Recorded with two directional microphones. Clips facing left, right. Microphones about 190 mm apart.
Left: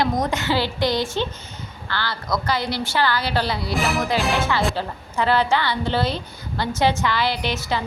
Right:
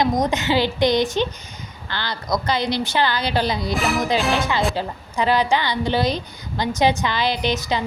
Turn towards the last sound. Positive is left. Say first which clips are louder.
# right 2 dB
turn(degrees=-20)  # may be behind; listen again after turning